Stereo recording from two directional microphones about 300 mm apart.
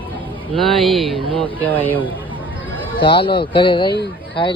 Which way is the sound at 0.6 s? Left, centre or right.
Centre.